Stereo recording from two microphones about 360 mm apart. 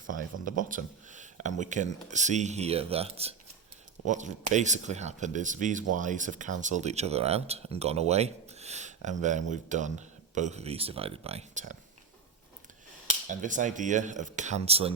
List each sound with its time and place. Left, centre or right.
0.1 s speech: right
13.2 s speech: right